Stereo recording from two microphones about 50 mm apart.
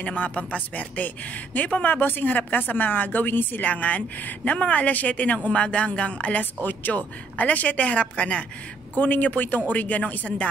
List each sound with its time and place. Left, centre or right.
0.0 s a man's voice: left
8.9 s a man's voice: left